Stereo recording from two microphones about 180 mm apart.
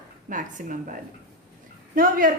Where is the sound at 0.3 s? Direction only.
45° right (ahead or behind).